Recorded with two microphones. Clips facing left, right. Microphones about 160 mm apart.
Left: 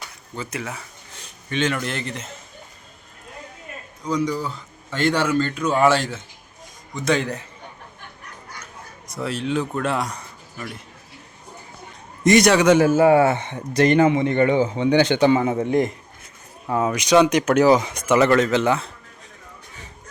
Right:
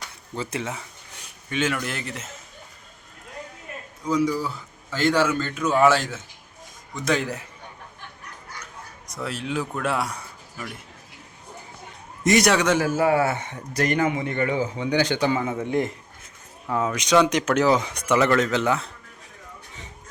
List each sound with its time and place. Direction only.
0.3 s speech: 25° right (ahead or behind); by 2.3 s 5° right (ahead or behind)
4.0 s a man's voice: 5° right (ahead or behind)
9.0 s a man's voice: centre (ahead or behind)
12.2 s a man's voice: centre (ahead or behind)
12.6 s a man's voice: 20° left (ahead or behind)
17.1 s a man's voice: 10° left (ahead or behind)